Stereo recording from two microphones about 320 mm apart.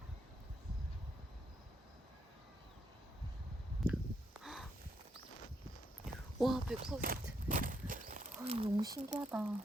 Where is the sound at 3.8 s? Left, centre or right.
Centre.